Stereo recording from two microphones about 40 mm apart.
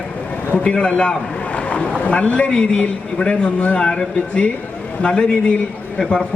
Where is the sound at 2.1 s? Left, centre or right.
Left.